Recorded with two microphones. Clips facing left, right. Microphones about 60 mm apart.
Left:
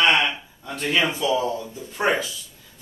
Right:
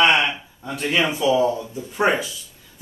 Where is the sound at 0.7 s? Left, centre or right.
Centre.